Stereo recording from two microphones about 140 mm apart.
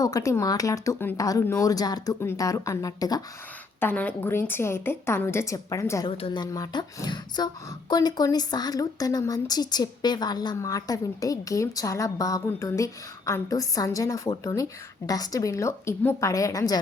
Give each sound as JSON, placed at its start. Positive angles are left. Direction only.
{"t": 0.0, "sound": "speech", "side_deg": 25}
{"t": 3.8, "sound": "a woman's voice", "side_deg": 15}
{"t": 6.1, "sound": "speech", "side_deg": 40}